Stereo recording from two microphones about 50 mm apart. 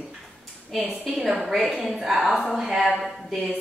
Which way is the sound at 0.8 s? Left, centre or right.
Right.